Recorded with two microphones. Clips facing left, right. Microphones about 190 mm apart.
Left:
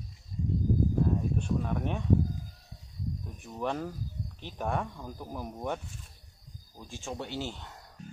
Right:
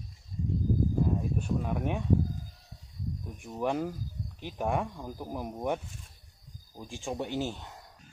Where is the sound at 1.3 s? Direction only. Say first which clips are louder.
Even; 10° right (ahead or behind).